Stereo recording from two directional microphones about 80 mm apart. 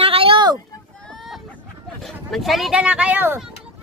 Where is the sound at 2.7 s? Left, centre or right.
Centre.